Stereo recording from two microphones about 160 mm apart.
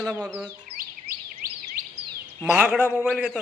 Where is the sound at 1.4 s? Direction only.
60° right (ahead or behind).